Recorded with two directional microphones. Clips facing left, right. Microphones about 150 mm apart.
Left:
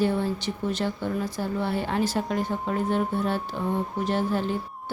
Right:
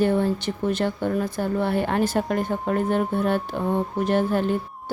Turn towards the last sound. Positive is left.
turn(degrees=-55)  # may be behind; listen again after turning